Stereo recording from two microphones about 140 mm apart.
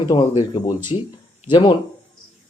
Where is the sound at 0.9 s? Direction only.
40° left (ahead or behind).